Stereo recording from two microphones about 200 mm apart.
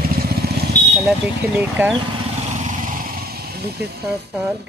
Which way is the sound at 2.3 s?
35° right (ahead or behind).